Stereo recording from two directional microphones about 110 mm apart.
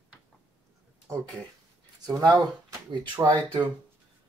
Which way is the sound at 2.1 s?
35° right (ahead or behind).